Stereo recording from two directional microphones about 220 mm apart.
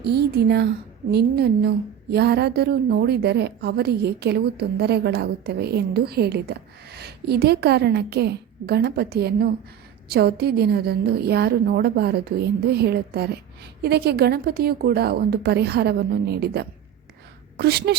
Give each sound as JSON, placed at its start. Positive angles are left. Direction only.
{"t": 0.0, "sound": "speech", "side_deg": -50}